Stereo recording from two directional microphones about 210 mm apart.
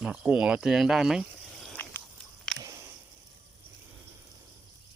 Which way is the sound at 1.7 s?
10° left (ahead or behind).